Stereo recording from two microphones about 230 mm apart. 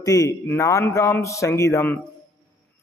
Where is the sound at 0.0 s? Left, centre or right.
Centre.